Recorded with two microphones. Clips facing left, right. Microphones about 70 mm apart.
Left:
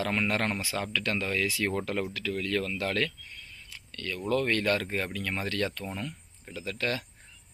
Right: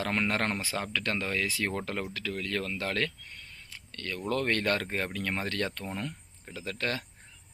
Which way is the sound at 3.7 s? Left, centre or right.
Right.